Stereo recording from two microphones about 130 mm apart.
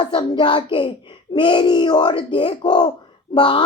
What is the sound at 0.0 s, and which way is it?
Speech, 35° left (ahead or behind).